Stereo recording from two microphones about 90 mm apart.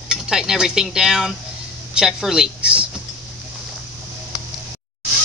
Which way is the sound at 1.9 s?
5° right (ahead or behind).